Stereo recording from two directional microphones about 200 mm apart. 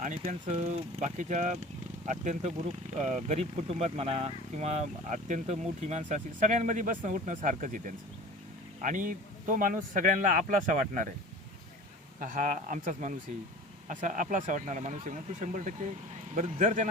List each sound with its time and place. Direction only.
0.3 s speech: 35° right (ahead or behind)
12.2 s speech: 40° right (ahead or behind)